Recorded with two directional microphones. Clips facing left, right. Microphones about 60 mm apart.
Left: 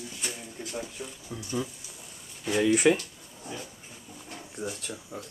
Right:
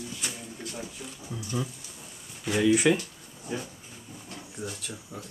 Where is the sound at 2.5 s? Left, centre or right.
Centre.